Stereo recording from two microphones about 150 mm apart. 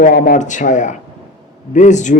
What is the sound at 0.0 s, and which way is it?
Speech, 80° left.